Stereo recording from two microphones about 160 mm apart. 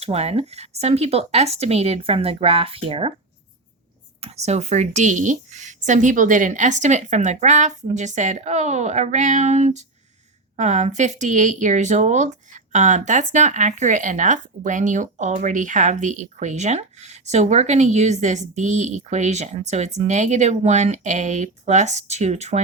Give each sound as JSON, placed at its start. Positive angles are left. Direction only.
{"t": 0.0, "sound": "speech", "side_deg": -40}
{"t": 4.2, "sound": "speech", "side_deg": -40}